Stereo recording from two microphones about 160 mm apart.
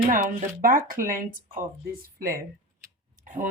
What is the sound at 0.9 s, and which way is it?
Speech, 60° right (ahead or behind).